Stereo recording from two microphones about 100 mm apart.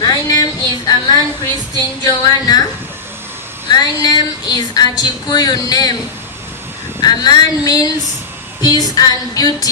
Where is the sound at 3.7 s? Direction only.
40° left (ahead or behind).